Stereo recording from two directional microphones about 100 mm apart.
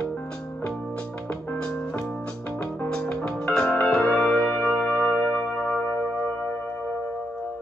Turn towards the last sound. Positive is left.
turn(degrees=15)  # may be behind; listen again after turning